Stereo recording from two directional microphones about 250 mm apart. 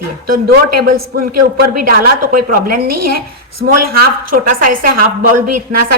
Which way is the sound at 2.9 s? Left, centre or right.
Right.